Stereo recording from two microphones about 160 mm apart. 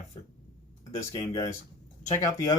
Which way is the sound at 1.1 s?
35° left (ahead or behind).